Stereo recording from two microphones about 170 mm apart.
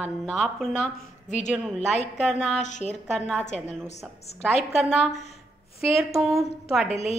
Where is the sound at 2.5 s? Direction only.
45° left (ahead or behind).